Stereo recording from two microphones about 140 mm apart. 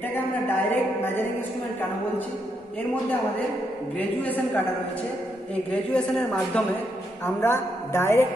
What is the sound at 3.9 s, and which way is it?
Speech, 10° left (ahead or behind).